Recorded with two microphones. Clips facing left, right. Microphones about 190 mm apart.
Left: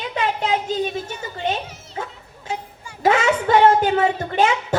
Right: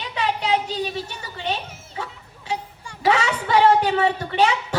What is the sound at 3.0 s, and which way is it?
A woman's voice, 45° left (ahead or behind).